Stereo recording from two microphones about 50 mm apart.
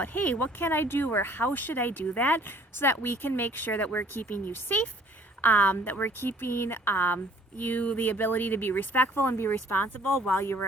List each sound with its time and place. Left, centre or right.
0.0 s speech: left
4.3 s speech: left
5.4 s speech: left
7.6 s speech: left